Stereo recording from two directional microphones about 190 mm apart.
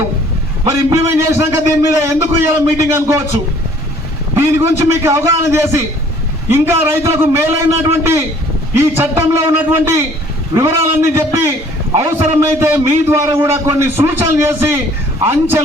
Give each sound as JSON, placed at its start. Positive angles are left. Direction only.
{"t": 0.7, "sound": "a man's voice", "side_deg": -15}
{"t": 4.4, "sound": "a man's voice", "side_deg": -15}